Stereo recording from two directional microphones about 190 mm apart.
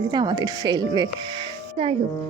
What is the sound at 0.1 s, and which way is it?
A woman's voice, 20° right (ahead or behind).